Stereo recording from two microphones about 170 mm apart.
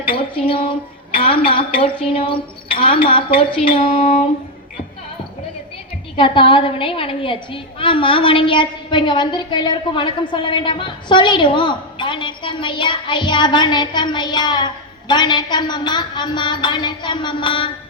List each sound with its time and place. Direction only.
0.1 s a woman's voice: 30° left (ahead or behind)
6.1 s a woman's voice: 30° left (ahead or behind)